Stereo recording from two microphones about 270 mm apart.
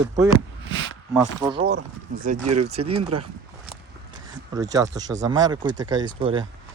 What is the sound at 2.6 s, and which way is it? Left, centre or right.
Speech, right.